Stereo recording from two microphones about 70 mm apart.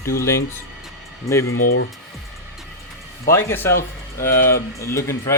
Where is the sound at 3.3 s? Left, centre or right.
Left.